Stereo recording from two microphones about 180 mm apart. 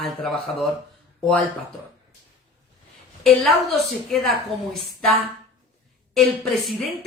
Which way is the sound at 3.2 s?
Centre (ahead or behind).